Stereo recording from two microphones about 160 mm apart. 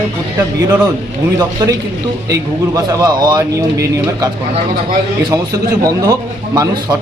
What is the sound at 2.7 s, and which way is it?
Speech, 20° right (ahead or behind).